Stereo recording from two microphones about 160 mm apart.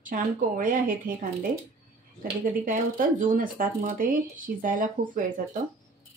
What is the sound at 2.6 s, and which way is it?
Speech, 60° right (ahead or behind).